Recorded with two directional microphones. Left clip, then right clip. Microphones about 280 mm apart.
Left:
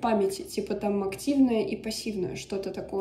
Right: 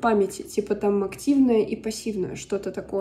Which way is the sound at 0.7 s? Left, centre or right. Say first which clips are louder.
Right 6 dB; left.